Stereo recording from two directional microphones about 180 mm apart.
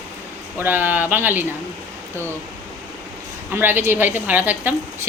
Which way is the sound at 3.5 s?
10° right (ahead or behind).